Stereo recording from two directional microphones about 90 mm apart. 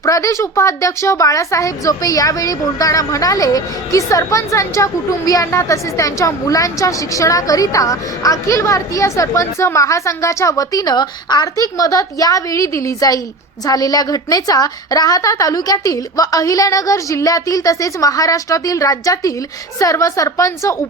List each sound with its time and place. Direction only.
0.0 s a woman's voice: 35° left (ahead or behind)